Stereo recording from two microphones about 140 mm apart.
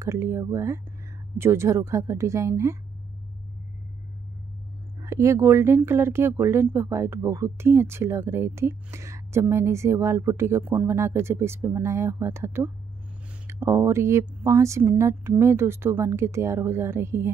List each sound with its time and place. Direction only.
0.0 s speech: 20° right (ahead or behind)
5.0 s speech: 20° right (ahead or behind)